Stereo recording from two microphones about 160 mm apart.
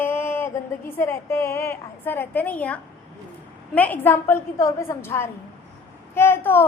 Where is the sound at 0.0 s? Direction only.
15° left (ahead or behind).